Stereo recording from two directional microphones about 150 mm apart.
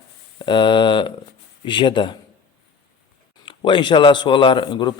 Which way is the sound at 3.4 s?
35° left (ahead or behind).